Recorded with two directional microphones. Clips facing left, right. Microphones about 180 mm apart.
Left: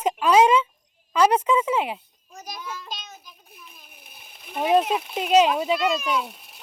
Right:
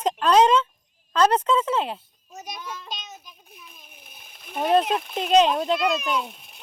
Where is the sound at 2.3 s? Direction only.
Centre (ahead or behind).